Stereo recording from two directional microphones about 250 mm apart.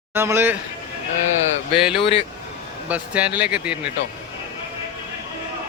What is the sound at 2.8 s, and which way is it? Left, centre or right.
Speech, centre.